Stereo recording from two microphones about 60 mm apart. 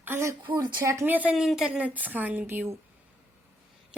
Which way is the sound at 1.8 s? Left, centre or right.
Right.